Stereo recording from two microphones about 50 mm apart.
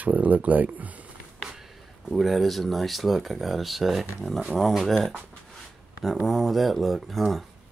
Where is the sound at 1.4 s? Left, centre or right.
Centre.